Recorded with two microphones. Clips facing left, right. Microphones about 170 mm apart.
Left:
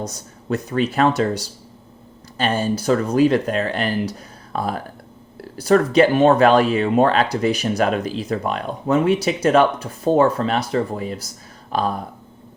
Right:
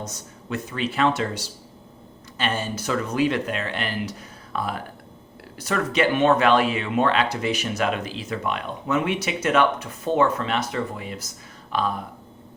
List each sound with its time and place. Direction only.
0.0 s speech: 35° left (ahead or behind)